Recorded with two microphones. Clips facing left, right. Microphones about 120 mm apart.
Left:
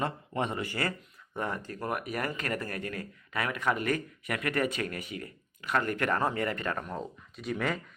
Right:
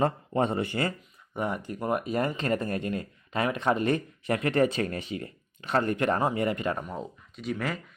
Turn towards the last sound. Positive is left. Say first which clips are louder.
# even
turn(degrees=0)  # may be behind; listen again after turning